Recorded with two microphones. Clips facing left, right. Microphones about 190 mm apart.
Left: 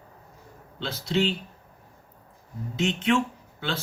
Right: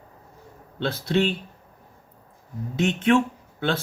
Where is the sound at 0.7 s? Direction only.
55° right (ahead or behind).